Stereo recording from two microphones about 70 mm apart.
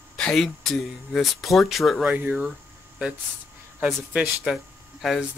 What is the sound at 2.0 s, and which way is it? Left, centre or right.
Speech, right.